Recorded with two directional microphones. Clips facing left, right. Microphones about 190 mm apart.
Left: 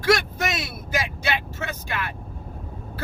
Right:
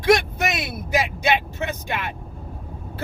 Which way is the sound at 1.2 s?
20° right (ahead or behind).